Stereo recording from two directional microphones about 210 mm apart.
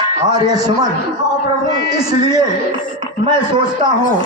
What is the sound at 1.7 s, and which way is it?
Speech, 20° right (ahead or behind).